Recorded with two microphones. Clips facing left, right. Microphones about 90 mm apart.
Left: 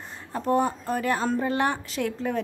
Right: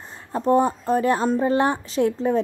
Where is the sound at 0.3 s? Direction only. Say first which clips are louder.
Right 5 dB; 30° right (ahead or behind).